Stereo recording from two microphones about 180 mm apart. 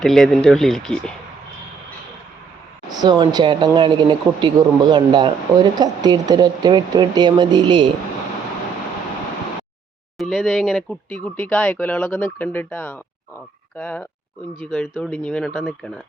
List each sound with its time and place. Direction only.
0.0 s speech: centre (ahead or behind)
2.9 s speech: 25° right (ahead or behind)
10.2 s speech: centre (ahead or behind)